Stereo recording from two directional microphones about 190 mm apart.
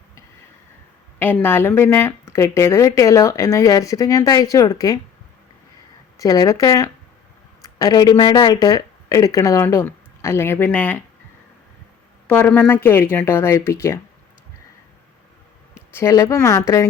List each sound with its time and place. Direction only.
1.2 s a woman's voice: 10° left (ahead or behind)
6.1 s a woman's voice: 20° left (ahead or behind)
12.3 s a woman's voice: 10° left (ahead or behind)
15.7 s a woman's voice: 15° left (ahead or behind)